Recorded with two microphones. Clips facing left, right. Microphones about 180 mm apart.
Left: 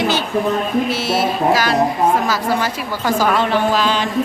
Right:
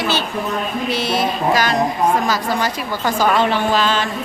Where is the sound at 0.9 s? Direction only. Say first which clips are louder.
Left 1 dB; 5° left (ahead or behind).